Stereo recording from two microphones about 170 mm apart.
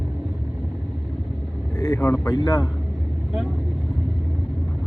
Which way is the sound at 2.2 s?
25° left (ahead or behind).